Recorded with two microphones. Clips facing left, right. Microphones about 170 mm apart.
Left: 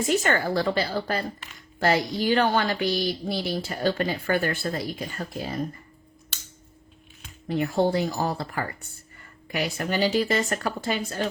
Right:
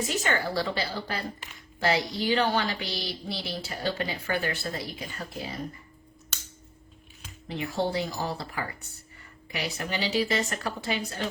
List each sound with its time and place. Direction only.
0.0 s speech: 50° left (ahead or behind)
7.4 s speech: 50° left (ahead or behind)